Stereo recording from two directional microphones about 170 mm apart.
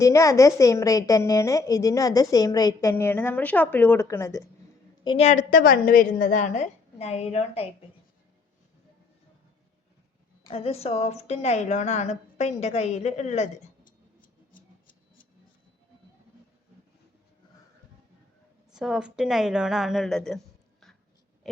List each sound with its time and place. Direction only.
0.0 s a woman's voice: 15° left (ahead or behind)
2.9 s a woman's voice: 10° left (ahead or behind)
5.0 s a woman's voice: 40° left (ahead or behind)
10.5 s a woman's voice: 35° left (ahead or behind); by 14.6 s 55° left (ahead or behind)
18.7 s a woman's voice: 5° right (ahead or behind)